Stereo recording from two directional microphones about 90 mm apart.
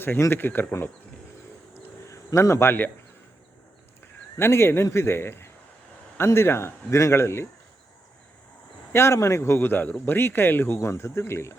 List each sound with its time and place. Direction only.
0.0 s a man's voice: 25° left (ahead or behind)
1.7 s a sound: 35° left (ahead or behind)
4.0 s a man's voice: 25° left (ahead or behind)
8.9 s a man's voice: 30° left (ahead or behind)